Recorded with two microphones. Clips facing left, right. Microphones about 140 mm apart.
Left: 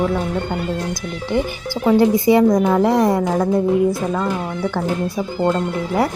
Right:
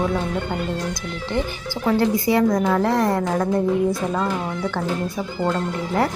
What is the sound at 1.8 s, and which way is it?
A woman's voice, 15° left (ahead or behind).